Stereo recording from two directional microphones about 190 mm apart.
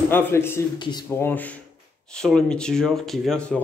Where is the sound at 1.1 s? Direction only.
10° left (ahead or behind).